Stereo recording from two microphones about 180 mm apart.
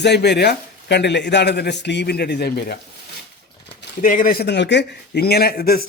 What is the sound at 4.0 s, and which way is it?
A man's voice, 50° left (ahead or behind).